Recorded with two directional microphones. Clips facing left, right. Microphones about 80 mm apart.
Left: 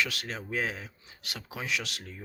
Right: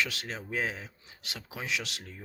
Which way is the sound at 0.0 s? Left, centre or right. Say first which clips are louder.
Left 1 dB; right.